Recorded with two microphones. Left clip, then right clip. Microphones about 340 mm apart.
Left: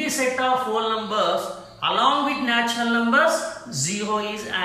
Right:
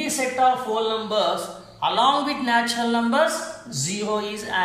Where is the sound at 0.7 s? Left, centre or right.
Centre.